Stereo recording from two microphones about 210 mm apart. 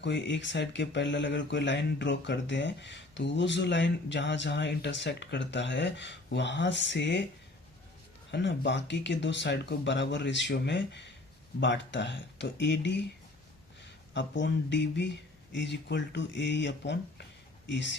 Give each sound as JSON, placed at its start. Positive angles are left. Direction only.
{"t": 0.0, "sound": "speech", "side_deg": 55}
{"t": 8.3, "sound": "speech", "side_deg": 55}
{"t": 14.1, "sound": "speech", "side_deg": 55}